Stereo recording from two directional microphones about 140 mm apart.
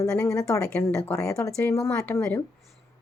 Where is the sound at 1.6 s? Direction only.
20° left (ahead or behind).